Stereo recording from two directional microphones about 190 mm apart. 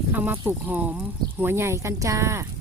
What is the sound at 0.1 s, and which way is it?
Speech, 10° right (ahead or behind).